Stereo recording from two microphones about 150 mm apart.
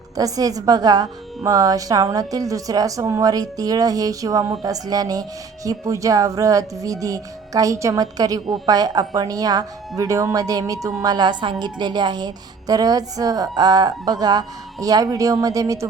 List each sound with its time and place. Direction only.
0.2 s speech: 25° right (ahead or behind)